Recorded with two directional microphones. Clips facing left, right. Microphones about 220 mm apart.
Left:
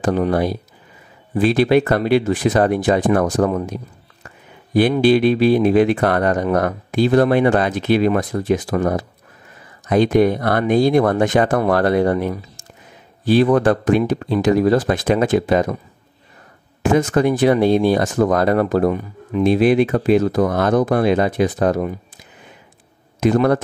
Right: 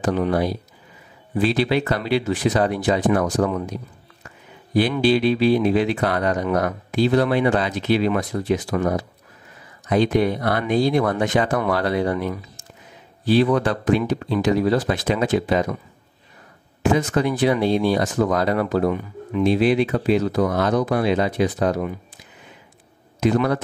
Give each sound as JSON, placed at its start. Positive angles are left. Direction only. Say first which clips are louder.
{"t": 0.0, "sound": "speech", "louder": "left 3 dB", "side_deg": 50}
{"t": 4.9, "sound": "speech", "louder": "left 4 dB", "side_deg": 50}
{"t": 16.8, "sound": "speech", "louder": "left 4 dB", "side_deg": 50}
{"t": 23.2, "sound": "speech", "louder": "left 4 dB", "side_deg": 50}